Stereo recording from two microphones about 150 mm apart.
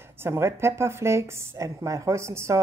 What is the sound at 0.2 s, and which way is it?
A woman's voice, 15° right (ahead or behind).